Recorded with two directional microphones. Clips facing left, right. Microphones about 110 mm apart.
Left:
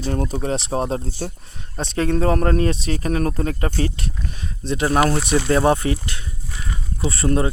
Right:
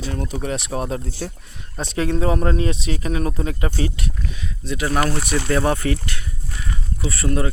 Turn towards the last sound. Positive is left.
turn(degrees=25)  # may be behind; listen again after turning